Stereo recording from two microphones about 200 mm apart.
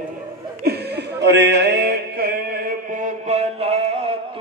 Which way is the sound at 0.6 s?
55° right (ahead or behind).